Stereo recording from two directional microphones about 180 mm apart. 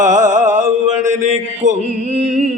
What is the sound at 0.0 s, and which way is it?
Mantra, 40° right (ahead or behind).